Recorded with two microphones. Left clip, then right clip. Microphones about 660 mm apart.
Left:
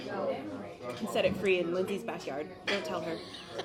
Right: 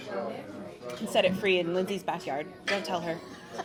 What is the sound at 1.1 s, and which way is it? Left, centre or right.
Speech, right.